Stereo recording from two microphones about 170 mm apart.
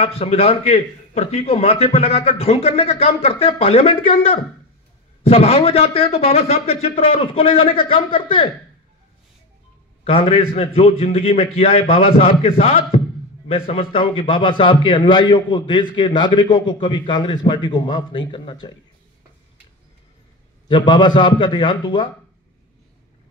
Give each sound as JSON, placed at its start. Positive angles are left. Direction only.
{"t": 0.0, "sound": "a man's voice", "side_deg": 35}
{"t": 10.0, "sound": "a man's voice", "side_deg": 35}
{"t": 20.6, "sound": "a man's voice", "side_deg": 25}